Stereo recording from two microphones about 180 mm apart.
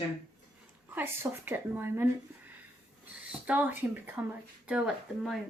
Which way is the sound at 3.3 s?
10° right (ahead or behind).